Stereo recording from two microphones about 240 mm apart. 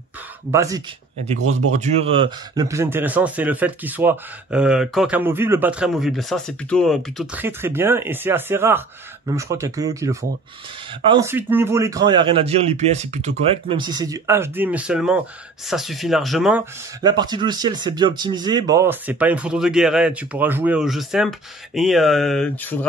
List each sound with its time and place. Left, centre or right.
0.5 s speech: centre
7.4 s speech: centre; by 13.3 s right
13.7 s speech: centre
17.0 s speech: centre